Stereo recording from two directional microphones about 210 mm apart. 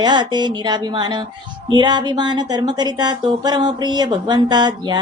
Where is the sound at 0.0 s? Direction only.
20° right (ahead or behind).